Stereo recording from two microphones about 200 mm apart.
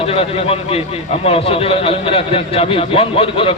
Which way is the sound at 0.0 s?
30° left (ahead or behind).